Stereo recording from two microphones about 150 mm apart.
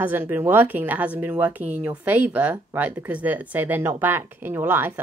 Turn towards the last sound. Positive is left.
turn(degrees=-15)  # may be behind; listen again after turning